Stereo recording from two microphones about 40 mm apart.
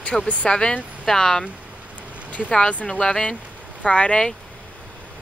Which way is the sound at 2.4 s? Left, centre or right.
Centre.